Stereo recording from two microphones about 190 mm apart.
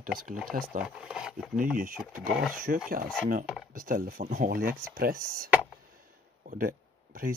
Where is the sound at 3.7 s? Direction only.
45° right (ahead or behind).